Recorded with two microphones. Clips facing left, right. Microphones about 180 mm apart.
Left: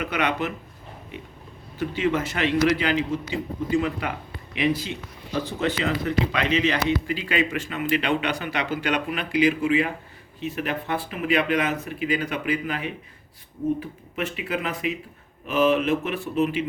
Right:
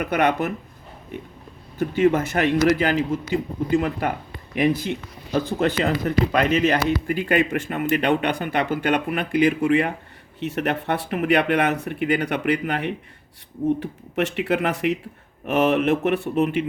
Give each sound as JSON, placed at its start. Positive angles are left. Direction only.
{"t": 0.0, "sound": "speech", "side_deg": -50}
{"t": 1.8, "sound": "speech", "side_deg": -50}